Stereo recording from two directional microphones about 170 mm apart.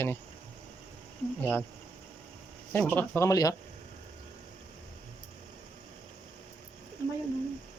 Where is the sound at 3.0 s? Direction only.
15° left (ahead or behind).